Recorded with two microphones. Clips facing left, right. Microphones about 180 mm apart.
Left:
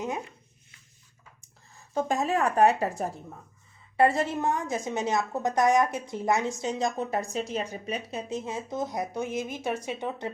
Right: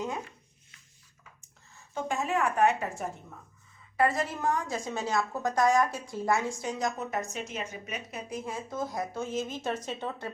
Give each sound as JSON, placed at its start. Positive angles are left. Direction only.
{"t": 1.7, "sound": "a woman's voice", "side_deg": 40}